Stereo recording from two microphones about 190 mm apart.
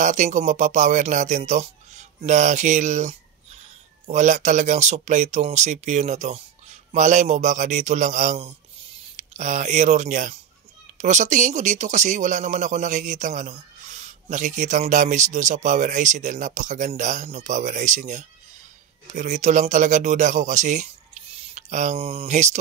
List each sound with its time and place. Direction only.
0.0 s speech: 40° right (ahead or behind)